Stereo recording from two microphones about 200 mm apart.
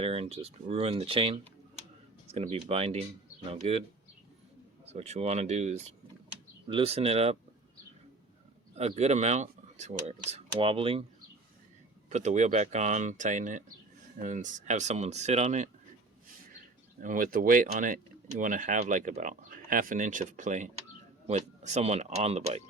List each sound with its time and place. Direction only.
0.0 s speech: 30° right (ahead or behind)
4.9 s speech: 35° right (ahead or behind)
8.7 s speech: 35° right (ahead or behind)
12.0 s speech: 35° right (ahead or behind)
17.0 s speech: 40° right (ahead or behind)